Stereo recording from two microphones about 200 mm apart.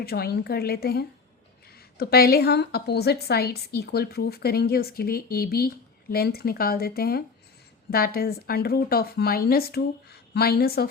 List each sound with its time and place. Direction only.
0.0 s a woman's voice: 50° left (ahead or behind)